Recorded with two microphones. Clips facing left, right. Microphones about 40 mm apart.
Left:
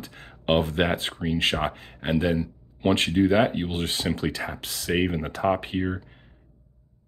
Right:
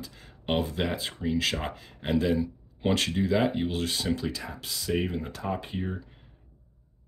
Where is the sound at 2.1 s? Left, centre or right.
Left.